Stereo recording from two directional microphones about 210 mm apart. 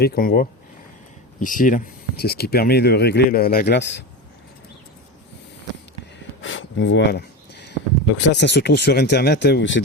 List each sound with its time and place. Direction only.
0.0 s speech: 45° left (ahead or behind)
6.4 s a sound: 65° left (ahead or behind)
8.2 s speech: 55° left (ahead or behind)